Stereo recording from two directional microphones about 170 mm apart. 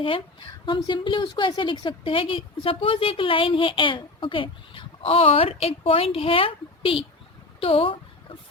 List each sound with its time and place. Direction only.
0.0 s a woman's voice: 30° left (ahead or behind)
7.6 s chicken: 35° left (ahead or behind)